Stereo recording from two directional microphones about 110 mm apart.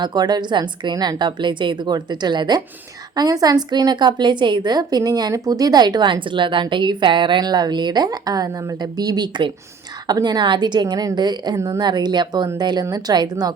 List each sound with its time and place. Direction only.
0.0 s a woman's voice: 40° right (ahead or behind)
11.5 s a woman's voice: 30° right (ahead or behind)
11.8 s a woman's voice: 40° right (ahead or behind)